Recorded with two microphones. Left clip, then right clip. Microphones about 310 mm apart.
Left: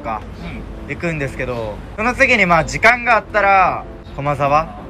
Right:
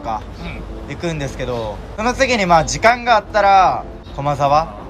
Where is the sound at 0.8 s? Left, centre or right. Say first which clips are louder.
Left 2 dB; centre.